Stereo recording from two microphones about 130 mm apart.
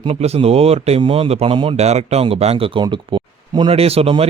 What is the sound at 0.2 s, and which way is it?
Speech, 50° right (ahead or behind).